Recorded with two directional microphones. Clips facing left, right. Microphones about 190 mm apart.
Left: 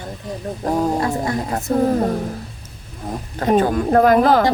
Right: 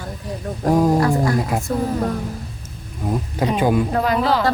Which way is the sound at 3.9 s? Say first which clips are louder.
Left 6 dB; 50° left (ahead or behind).